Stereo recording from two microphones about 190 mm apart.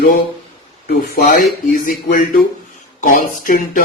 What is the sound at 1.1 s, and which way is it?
A man's voice, 45° left (ahead or behind).